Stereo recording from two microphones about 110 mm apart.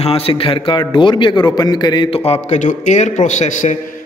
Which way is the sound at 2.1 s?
65° left (ahead or behind).